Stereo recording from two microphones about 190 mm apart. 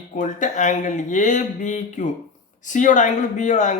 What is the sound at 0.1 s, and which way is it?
Speech, 45° left (ahead or behind).